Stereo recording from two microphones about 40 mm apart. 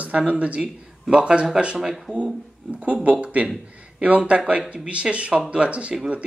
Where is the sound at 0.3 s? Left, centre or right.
Right.